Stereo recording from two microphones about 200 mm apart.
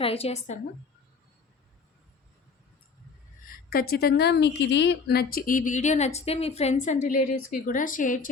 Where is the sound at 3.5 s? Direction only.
50° left (ahead or behind).